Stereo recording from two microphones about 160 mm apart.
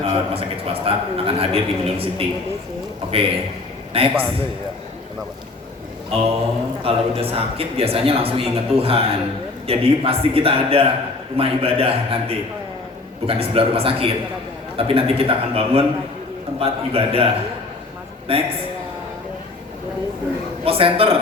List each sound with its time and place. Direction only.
0.0 s a man's voice: 35° right (ahead or behind)
6.8 s a man's voice: 35° right (ahead or behind)
20.7 s a man's voice: 35° right (ahead or behind)